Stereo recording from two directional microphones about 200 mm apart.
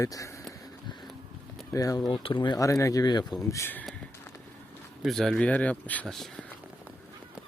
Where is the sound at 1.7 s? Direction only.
15° left (ahead or behind).